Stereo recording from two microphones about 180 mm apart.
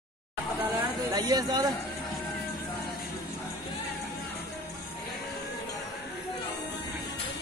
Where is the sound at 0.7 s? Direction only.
20° right (ahead or behind).